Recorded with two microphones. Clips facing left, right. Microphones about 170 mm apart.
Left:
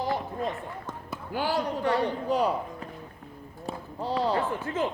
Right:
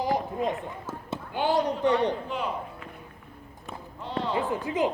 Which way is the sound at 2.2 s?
40° left (ahead or behind).